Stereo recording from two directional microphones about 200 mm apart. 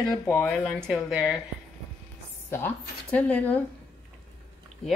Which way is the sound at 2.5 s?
10° left (ahead or behind).